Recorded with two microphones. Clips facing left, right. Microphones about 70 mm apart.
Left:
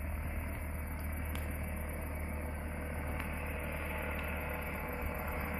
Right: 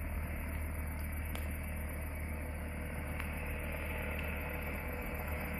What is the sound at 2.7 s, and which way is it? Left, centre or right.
Vehicle, left.